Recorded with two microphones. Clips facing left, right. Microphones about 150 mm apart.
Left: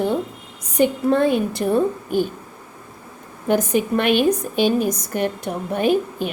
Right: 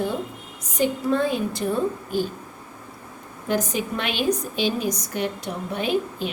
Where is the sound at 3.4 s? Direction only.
55° left (ahead or behind).